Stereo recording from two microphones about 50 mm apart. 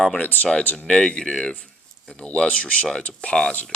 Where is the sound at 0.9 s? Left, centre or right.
Centre.